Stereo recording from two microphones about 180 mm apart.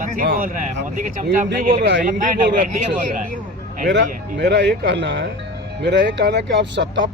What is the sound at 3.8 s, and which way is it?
Speech, 75° right (ahead or behind).